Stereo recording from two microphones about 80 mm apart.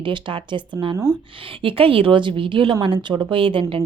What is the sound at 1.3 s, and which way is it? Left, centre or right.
A woman's voice, right.